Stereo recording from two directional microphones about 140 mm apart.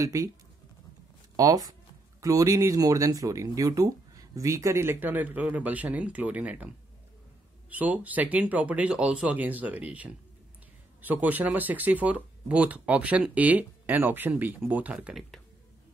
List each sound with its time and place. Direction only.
0.0 s speech: 25° right (ahead or behind)
1.3 s speech: 25° right (ahead or behind); by 6.7 s 10° right (ahead or behind)
7.7 s speech: 10° right (ahead or behind)